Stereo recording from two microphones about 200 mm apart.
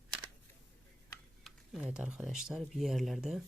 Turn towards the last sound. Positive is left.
turn(degrees=0)  # may be behind; listen again after turning